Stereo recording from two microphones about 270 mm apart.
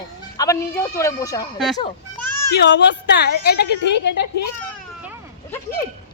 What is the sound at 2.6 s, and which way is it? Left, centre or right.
Speech, left.